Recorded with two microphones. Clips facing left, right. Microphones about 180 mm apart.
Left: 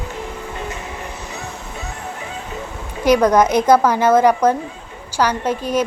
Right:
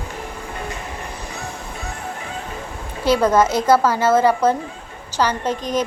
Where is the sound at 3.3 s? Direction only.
15° left (ahead or behind).